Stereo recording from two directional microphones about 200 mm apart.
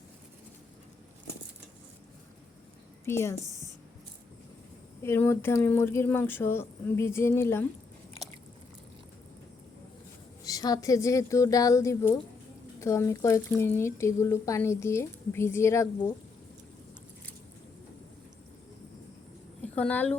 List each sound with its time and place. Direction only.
3.0 s a woman's voice: 10° left (ahead or behind)
5.0 s speech: 10° left (ahead or behind)
10.4 s speech: 20° left (ahead or behind)
19.6 s a woman's voice: 5° left (ahead or behind)